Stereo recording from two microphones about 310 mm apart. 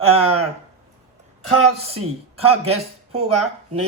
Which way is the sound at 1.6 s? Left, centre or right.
Centre.